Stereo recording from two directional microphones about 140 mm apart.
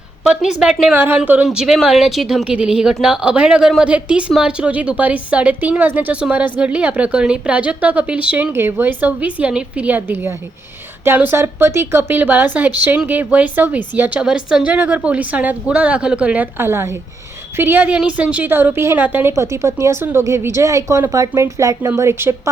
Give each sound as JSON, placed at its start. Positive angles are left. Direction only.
{"t": 0.3, "sound": "a woman's voice", "side_deg": -5}